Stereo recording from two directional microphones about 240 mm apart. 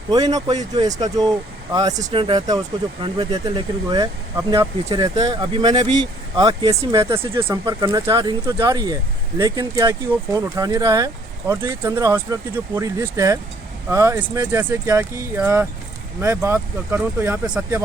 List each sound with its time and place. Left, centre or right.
0.1 s speech: centre
2.0 s speech: right